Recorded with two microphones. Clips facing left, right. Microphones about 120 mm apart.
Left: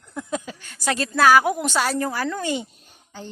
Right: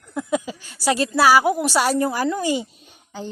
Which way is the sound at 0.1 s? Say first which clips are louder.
Right 5 dB; 15° right (ahead or behind).